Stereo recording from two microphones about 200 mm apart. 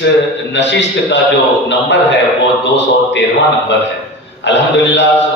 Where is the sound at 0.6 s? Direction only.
65° left (ahead or behind).